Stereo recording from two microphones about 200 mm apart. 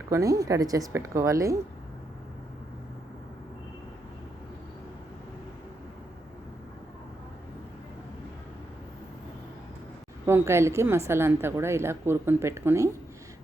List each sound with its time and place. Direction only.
0.1 s a woman's voice: 15° right (ahead or behind)
10.2 s a woman's voice: 15° right (ahead or behind)